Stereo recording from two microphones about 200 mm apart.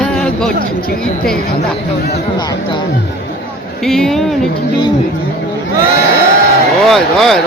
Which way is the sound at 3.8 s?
Centre (ahead or behind).